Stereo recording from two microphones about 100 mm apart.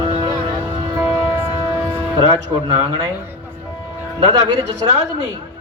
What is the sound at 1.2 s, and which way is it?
Music, 25° right (ahead or behind).